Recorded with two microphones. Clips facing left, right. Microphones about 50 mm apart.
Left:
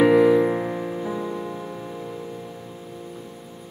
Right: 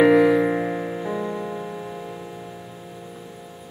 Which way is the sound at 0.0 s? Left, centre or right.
Centre.